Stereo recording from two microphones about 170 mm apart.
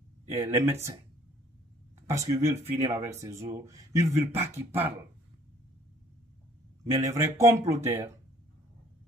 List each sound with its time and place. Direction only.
0.4 s speech: 15° right (ahead or behind)
2.1 s speech: 20° right (ahead or behind)
6.8 s speech: 20° right (ahead or behind)